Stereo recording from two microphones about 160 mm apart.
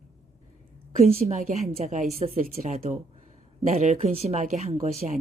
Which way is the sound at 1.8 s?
45° right (ahead or behind).